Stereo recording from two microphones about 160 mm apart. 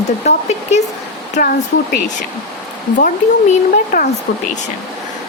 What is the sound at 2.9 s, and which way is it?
Speech, 55° left (ahead or behind).